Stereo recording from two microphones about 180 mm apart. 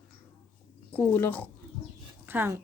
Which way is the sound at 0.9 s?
10° left (ahead or behind).